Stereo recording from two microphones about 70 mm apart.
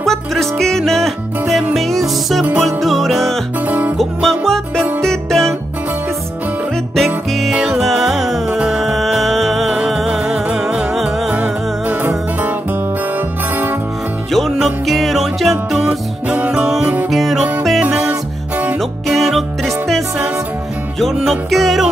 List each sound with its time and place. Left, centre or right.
0.0 s music: centre
3.6 s music: right
4.0 s music: centre
7.5 s music: centre
11.2 s music: right
14.3 s music: centre
16.3 s music: centre